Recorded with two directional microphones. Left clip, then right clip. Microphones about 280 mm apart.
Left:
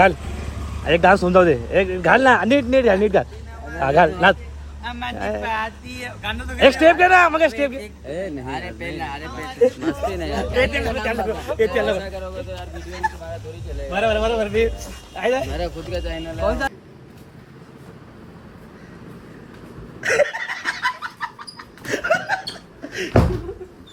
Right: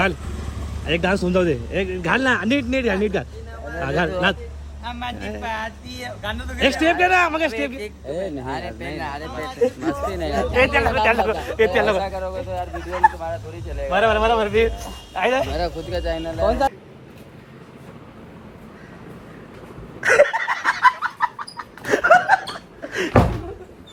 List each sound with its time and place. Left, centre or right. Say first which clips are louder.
0.0 s speech: left 6 dB; centre
15.5 s speech: right 2 dB; centre
16.2 s speech: right 2 dB; centre
20.0 s chicken: right 4 dB; centre